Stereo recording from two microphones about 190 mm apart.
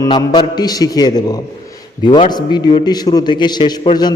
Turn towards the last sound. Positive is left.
turn(degrees=25)  # may be behind; listen again after turning